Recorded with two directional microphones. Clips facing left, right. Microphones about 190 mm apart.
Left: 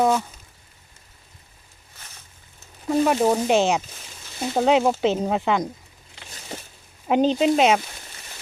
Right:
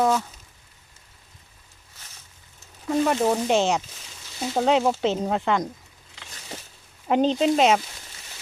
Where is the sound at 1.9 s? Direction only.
55° left (ahead or behind).